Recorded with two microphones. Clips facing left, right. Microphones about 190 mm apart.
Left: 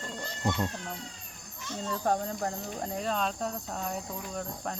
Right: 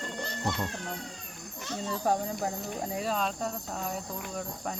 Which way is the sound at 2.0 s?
5° right (ahead or behind).